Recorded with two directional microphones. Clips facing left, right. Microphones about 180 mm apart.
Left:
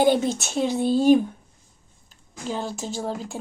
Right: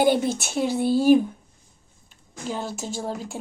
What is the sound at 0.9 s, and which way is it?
Speech, 20° left (ahead or behind).